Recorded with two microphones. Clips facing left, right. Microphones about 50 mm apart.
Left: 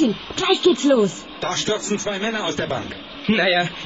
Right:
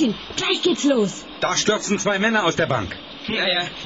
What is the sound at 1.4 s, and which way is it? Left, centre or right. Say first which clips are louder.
A man's voice: right 3 dB; right.